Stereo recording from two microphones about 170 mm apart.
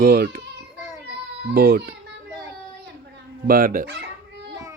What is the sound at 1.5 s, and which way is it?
Speech, 70° right (ahead or behind).